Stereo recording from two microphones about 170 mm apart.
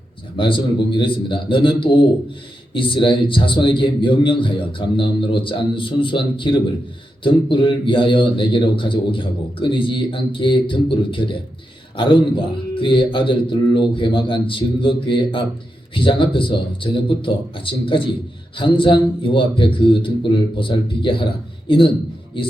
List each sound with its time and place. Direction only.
0.3 s a man's voice: 30° left (ahead or behind)